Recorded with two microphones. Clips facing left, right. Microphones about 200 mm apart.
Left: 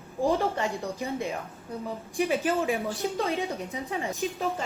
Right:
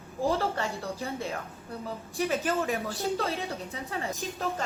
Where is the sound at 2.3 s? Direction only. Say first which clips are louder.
Left 2 dB; 10° left (ahead or behind).